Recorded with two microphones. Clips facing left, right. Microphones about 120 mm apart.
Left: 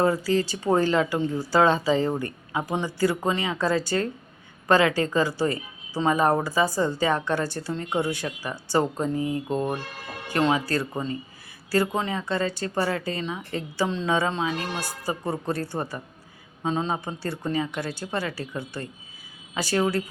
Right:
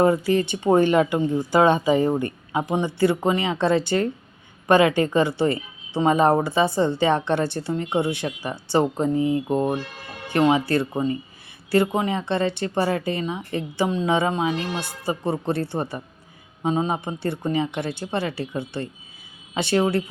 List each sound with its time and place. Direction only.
0.0 s speech: 20° right (ahead or behind)